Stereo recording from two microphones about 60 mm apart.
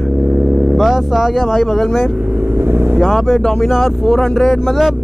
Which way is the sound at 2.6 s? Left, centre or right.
Right.